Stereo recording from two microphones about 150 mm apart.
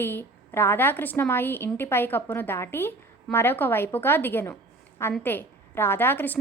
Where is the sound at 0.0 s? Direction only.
15° left (ahead or behind).